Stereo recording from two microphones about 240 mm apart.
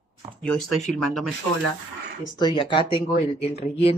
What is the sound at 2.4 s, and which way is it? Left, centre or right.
Speech, centre.